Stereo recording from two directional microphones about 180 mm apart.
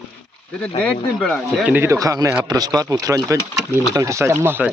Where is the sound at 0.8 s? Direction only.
5° left (ahead or behind).